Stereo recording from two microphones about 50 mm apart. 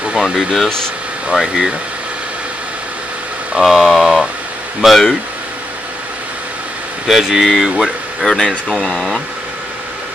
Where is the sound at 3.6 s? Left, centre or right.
Centre.